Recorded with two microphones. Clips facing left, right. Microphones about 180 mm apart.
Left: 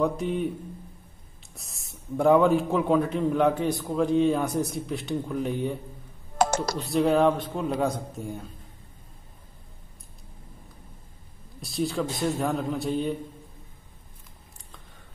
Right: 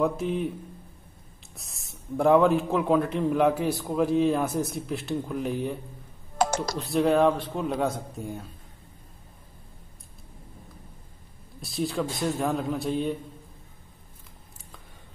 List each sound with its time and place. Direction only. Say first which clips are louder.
0.0 s a man's voice: even; centre (ahead or behind)
1.5 s a man's voice: left 1 dB; centre (ahead or behind)
6.3 s computer keyboard: left 1 dB; 50° left (ahead or behind)
6.8 s a man's voice: even; centre (ahead or behind)
11.6 s a man's voice: left 1 dB; centre (ahead or behind)